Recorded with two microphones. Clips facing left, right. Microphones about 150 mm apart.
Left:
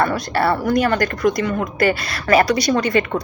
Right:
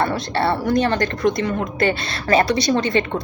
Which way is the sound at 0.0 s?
25° right (ahead or behind).